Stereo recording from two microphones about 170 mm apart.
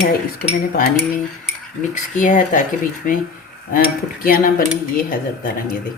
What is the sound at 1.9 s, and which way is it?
Speech, 50° left (ahead or behind).